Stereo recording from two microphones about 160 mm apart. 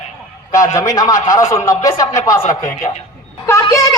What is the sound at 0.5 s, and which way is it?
Speech, 20° left (ahead or behind).